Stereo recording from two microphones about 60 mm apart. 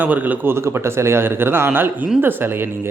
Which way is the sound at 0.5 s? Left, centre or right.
Right.